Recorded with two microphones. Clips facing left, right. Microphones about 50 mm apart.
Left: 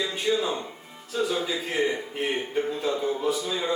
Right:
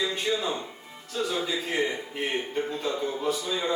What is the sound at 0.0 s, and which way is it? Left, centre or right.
A man's voice, centre.